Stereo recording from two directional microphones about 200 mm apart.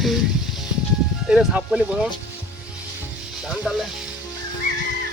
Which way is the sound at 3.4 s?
5° right (ahead or behind).